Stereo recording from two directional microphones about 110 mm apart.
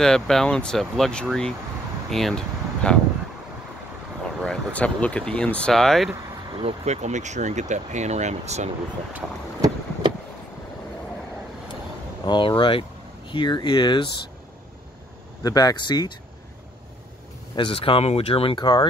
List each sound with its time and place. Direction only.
0.0 s speech: 5° left (ahead or behind)
2.0 s a sound: 5° left (ahead or behind)
4.2 s speech: 10° left (ahead or behind)
6.6 s speech: 80° right
12.3 s speech: 50° left (ahead or behind)
15.4 s speech: 35° left (ahead or behind)
17.6 s speech: 55° left (ahead or behind)
18.6 s speech: 40° left (ahead or behind)